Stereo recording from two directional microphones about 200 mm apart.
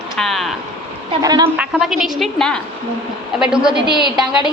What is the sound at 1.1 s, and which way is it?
Speech, 20° right (ahead or behind).